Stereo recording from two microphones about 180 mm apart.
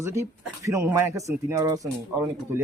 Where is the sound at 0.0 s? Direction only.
15° right (ahead or behind).